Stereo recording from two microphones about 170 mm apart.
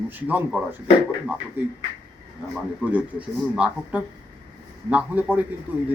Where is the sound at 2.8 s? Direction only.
5° right (ahead or behind).